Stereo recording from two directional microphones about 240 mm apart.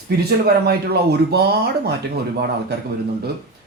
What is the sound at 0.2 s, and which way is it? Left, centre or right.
A man's voice, right.